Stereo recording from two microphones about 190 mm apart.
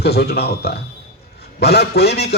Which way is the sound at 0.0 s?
60° left (ahead or behind).